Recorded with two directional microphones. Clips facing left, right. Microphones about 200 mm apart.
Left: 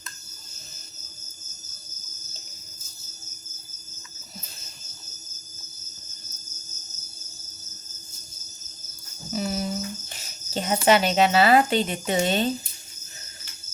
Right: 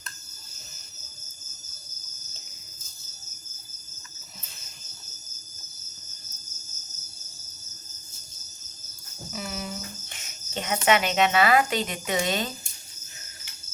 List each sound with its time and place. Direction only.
9.3 s cricket: 35° left (ahead or behind)
10.8 s speech: 35° left (ahead or behind)